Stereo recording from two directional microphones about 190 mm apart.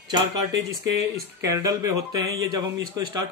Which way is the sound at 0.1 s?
20° right (ahead or behind).